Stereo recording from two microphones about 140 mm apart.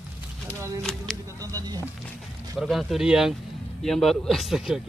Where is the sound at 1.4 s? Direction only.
25° right (ahead or behind).